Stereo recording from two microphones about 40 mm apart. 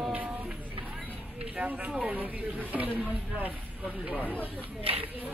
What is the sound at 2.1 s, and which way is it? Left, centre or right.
Speech, right.